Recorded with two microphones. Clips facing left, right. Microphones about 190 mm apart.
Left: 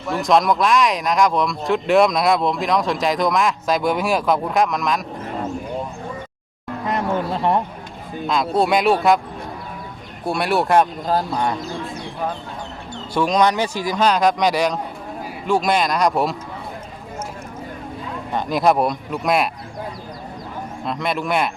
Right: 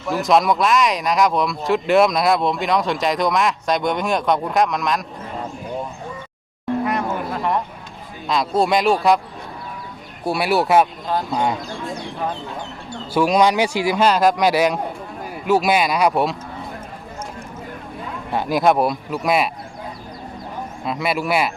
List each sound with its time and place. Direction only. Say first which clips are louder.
0.1 s speech: even; centre (ahead or behind)
6.8 s a sound: left 1 dB; 30° left (ahead or behind)
8.3 s speech: even; centre (ahead or behind)
10.2 s speech: right 1 dB; 5° right (ahead or behind)
11.1 s speech: left 2 dB; 40° left (ahead or behind)
13.1 s a man's voice: right 2 dB; 10° right (ahead or behind)
18.3 s speech: right 1 dB; 5° right (ahead or behind)
20.8 s speech: right 1 dB; 5° right (ahead or behind)